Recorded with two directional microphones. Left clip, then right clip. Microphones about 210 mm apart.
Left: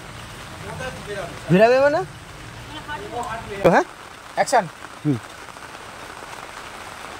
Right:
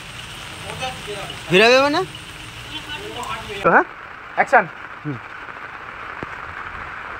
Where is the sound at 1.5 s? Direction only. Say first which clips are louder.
Right 2 dB; 50° left (ahead or behind).